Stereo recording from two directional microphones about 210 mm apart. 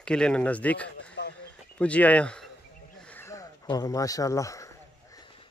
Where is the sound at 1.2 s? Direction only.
55° left (ahead or behind).